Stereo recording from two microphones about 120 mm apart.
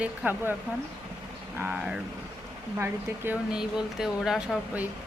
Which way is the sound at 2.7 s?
15° right (ahead or behind).